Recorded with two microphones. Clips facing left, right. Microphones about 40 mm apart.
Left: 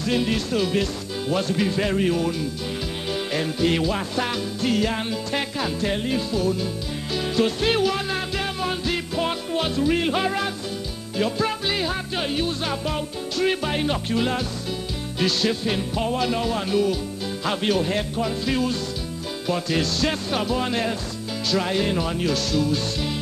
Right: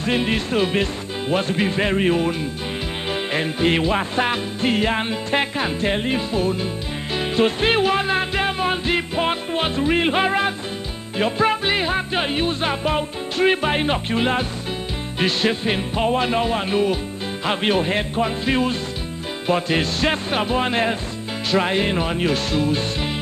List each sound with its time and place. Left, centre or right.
0.0 s music: right